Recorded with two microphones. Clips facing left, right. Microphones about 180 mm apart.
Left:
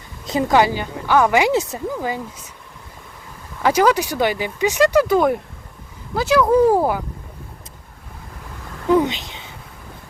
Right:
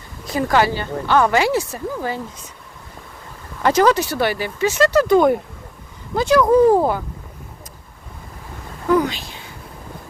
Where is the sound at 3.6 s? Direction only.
10° left (ahead or behind).